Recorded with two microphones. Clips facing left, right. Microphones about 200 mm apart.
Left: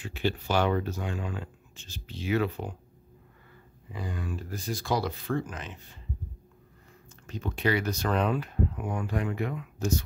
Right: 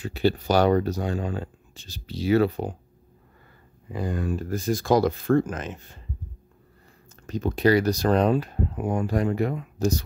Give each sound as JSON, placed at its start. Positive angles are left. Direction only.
{"t": 0.0, "sound": "speech", "side_deg": -35}
{"t": 3.9, "sound": "speech", "side_deg": -45}
{"t": 7.2, "sound": "speech", "side_deg": -40}